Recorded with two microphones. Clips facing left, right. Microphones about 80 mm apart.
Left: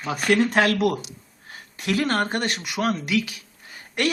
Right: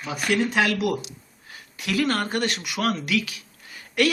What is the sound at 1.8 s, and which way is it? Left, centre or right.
Speech, left.